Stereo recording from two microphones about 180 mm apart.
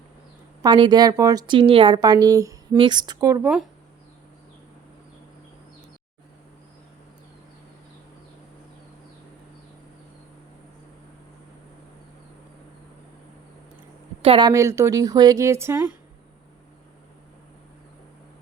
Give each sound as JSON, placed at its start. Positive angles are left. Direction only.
{"t": 0.6, "sound": "a woman's voice", "side_deg": -25}
{"t": 14.2, "sound": "speech", "side_deg": -30}